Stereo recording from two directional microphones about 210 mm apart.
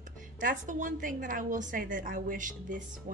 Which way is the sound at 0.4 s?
40° right (ahead or behind).